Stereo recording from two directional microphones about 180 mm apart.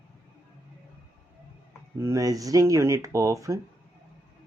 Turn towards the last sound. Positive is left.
turn(degrees=-15)  # may be behind; listen again after turning